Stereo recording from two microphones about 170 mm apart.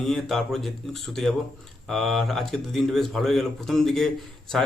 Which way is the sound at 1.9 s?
Centre (ahead or behind).